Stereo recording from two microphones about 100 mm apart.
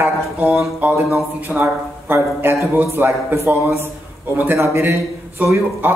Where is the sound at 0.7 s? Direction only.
15° right (ahead or behind).